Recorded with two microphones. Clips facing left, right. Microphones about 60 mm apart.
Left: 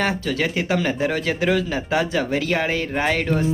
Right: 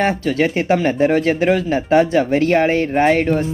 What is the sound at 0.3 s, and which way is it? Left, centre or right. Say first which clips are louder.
Speech: right 6 dB; right.